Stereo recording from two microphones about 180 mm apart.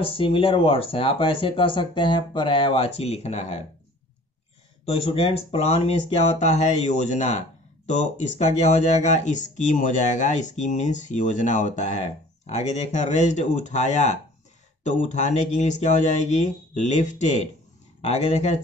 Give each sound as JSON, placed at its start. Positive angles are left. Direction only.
{"t": 0.0, "sound": "speech", "side_deg": 30}
{"t": 4.8, "sound": "speech", "side_deg": 30}